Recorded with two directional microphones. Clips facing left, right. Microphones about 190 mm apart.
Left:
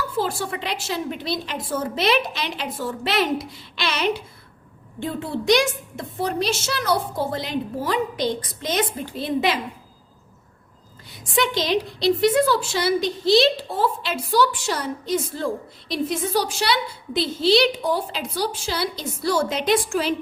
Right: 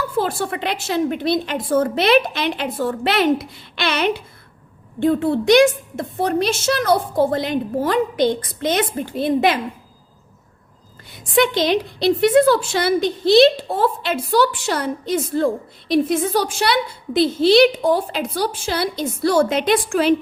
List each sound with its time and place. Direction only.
0.2 s a woman's voice: 55° right (ahead or behind)
11.2 s a woman's voice: 55° right (ahead or behind)